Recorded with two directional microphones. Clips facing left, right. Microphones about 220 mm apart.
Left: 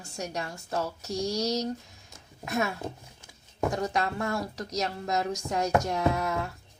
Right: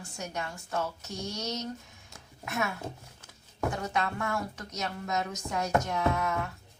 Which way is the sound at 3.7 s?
35° left (ahead or behind).